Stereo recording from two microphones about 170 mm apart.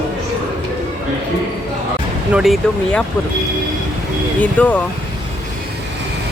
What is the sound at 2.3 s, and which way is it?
Speech, 5° right (ahead or behind).